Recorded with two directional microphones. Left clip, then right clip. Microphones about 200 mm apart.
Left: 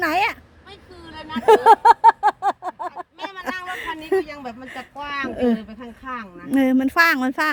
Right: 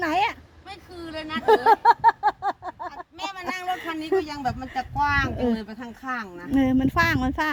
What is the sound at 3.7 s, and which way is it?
Speech, 20° left (ahead or behind).